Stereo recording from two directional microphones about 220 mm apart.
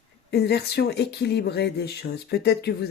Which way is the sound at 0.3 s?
45° left (ahead or behind).